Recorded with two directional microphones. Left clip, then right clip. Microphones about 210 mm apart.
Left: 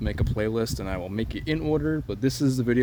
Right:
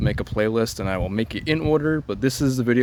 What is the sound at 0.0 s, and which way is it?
Speech, 25° right (ahead or behind).